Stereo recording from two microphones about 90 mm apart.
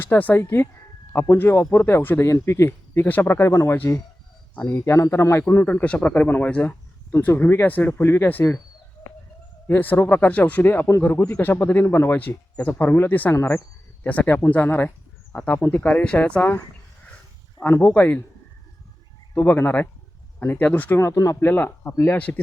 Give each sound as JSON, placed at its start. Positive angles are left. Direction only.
{"t": 0.0, "sound": "speech", "side_deg": 20}
{"t": 9.6, "sound": "speech", "side_deg": 20}
{"t": 17.6, "sound": "speech", "side_deg": 20}
{"t": 19.3, "sound": "speech", "side_deg": 20}
{"t": 21.0, "sound": "speech", "side_deg": 35}